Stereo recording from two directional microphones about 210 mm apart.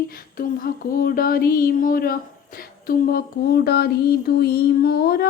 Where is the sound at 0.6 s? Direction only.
45° left (ahead or behind).